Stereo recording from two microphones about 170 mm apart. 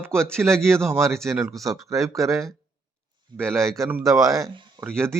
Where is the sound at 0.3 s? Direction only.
5° left (ahead or behind).